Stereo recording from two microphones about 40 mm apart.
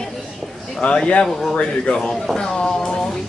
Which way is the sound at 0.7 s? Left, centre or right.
Left.